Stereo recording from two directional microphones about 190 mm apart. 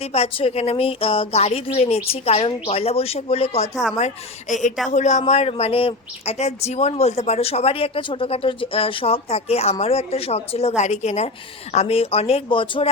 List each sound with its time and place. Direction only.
0.0 s a woman's voice: 30° left (ahead or behind)